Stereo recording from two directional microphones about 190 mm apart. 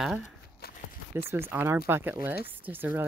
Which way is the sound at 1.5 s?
10° right (ahead or behind).